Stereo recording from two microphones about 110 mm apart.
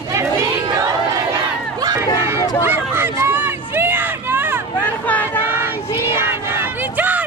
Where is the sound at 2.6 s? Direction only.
20° right (ahead or behind).